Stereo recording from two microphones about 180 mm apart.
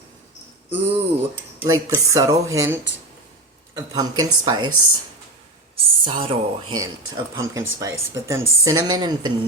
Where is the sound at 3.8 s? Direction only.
20° right (ahead or behind).